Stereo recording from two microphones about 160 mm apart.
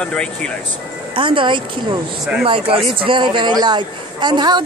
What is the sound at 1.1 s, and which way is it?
A man's voice, 30° right (ahead or behind).